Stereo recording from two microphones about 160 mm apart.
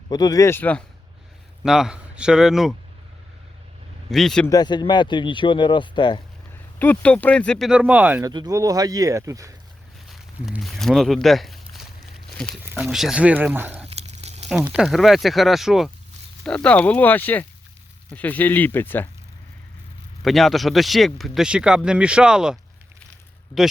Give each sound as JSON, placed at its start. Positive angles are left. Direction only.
{"t": 0.1, "sound": "speech", "side_deg": 25}
{"t": 1.6, "sound": "speech", "side_deg": -5}
{"t": 4.1, "sound": "speech", "side_deg": 0}
{"t": 4.4, "sound": "speech", "side_deg": 25}
{"t": 6.7, "sound": "speech", "side_deg": 10}
{"t": 7.7, "sound": "speech", "side_deg": -10}
{"t": 8.2, "sound": "speech", "side_deg": -25}
{"t": 10.1, "sound": "a sound", "side_deg": 0}
{"t": 12.3, "sound": "speech", "side_deg": 5}
{"t": 13.8, "sound": "a sound", "side_deg": -40}
{"t": 14.5, "sound": "speech", "side_deg": -5}
{"t": 20.2, "sound": "speech", "side_deg": 0}